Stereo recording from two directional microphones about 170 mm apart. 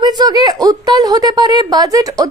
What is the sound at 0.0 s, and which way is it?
A woman's voice, 25° right (ahead or behind).